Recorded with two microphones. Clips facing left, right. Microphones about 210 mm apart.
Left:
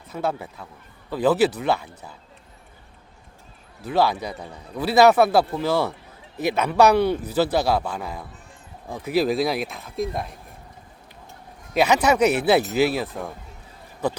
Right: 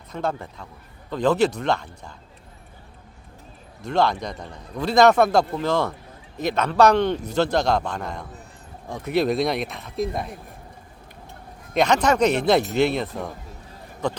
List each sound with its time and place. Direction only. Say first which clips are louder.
0.1 s a man's voice: left 1 dB; 5° left (ahead or behind)
3.8 s a man's voice: even; 5° left (ahead or behind)
11.7 s a man's voice: even; 5° left (ahead or behind)